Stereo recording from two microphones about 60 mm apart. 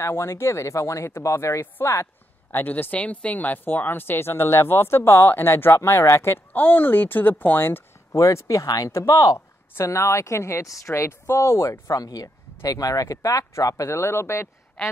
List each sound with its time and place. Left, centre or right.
0.0 s speech: left
2.6 s speech: left
5.8 s speech: left
6.5 s speech: left
8.1 s speech: left
8.9 s speech: left
9.8 s speech: left
11.9 s speech: left
13.8 s speech: left
14.8 s a man's voice: centre